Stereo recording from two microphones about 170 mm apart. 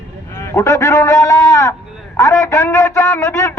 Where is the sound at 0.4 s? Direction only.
15° left (ahead or behind).